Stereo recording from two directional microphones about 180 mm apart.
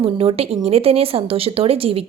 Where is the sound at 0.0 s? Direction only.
35° right (ahead or behind).